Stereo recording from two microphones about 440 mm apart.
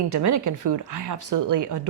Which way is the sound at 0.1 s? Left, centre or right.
Right.